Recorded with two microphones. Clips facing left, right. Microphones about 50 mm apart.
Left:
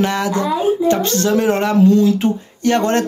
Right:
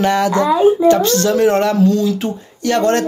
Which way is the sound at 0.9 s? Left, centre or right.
Left.